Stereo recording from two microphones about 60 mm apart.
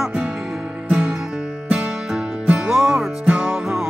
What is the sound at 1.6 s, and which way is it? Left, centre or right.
Music, centre.